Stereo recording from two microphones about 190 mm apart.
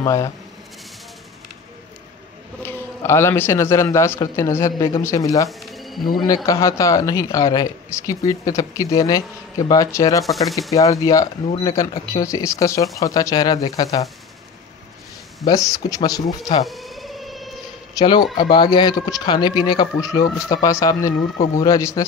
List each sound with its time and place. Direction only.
0.0 s speech: 15° left (ahead or behind)
2.6 s a man's voice: 10° left (ahead or behind)
5.5 s pigeon: centre (ahead or behind)
6.1 s a man's voice: 20° left (ahead or behind)
15.4 s speech: 20° left (ahead or behind)
16.6 s a sound: centre (ahead or behind)
17.9 s a man's voice: 20° left (ahead or behind)